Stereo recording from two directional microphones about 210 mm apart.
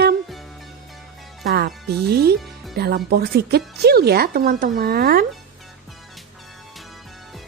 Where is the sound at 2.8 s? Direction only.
50° right (ahead or behind).